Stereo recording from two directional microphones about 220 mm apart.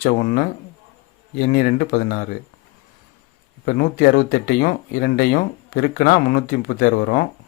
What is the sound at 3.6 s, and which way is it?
Speech, 40° left (ahead or behind).